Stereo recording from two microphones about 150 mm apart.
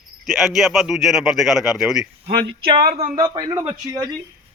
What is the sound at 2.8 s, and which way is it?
Speech, 50° right (ahead or behind).